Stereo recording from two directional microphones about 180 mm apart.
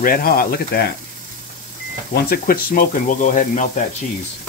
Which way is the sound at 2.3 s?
55° left (ahead or behind).